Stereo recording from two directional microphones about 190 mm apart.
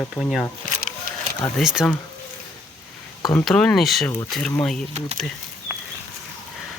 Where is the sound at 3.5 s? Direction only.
5° left (ahead or behind).